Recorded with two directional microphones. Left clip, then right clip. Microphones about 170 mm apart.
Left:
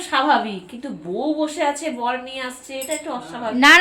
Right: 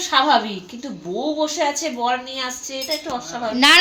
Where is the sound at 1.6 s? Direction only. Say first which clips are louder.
Right 1 dB; 20° right (ahead or behind).